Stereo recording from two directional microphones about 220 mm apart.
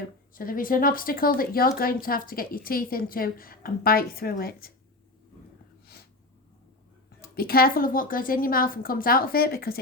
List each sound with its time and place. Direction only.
0.3 s a woman's voice: 40° left (ahead or behind)
7.3 s a woman's voice: 45° left (ahead or behind)